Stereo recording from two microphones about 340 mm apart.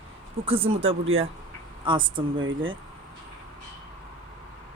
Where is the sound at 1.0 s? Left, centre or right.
Right.